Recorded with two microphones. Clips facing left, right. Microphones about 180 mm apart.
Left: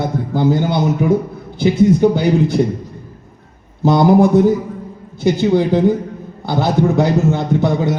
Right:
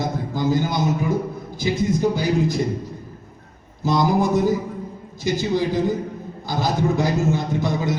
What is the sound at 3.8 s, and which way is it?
A man's voice, 65° left (ahead or behind).